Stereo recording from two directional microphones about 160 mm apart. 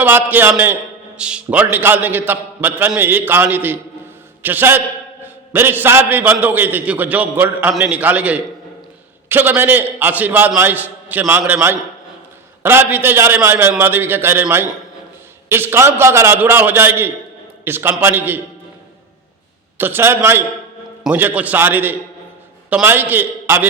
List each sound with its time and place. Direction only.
0.0 s a man's voice: 10° right (ahead or behind)
19.7 s a man's voice: 15° right (ahead or behind)